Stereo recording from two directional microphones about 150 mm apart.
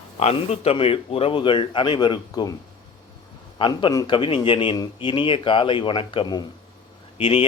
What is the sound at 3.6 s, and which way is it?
A man's voice, 30° left (ahead or behind).